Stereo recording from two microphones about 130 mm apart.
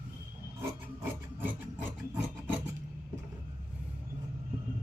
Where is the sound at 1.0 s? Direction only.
15° right (ahead or behind).